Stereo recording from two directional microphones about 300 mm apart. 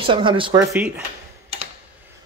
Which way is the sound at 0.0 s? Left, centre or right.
Centre.